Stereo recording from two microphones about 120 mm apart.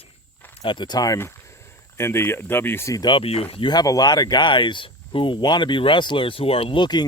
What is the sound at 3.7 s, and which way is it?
Speech, 35° left (ahead or behind).